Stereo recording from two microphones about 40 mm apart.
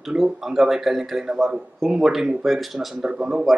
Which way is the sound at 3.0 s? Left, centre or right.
Right.